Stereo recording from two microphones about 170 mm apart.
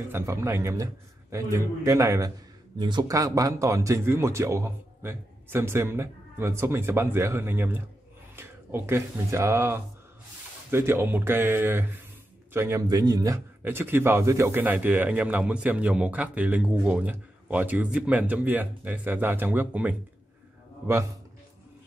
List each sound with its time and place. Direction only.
0.1 s a man's voice: 15° right (ahead or behind)